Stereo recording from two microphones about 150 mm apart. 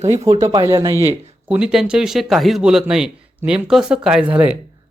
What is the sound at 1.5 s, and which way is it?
Speech, 5° right (ahead or behind).